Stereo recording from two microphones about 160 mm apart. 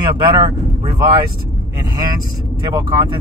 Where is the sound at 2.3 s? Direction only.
25° right (ahead or behind).